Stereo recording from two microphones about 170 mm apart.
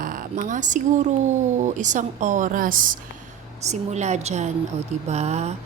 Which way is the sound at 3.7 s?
40° right (ahead or behind).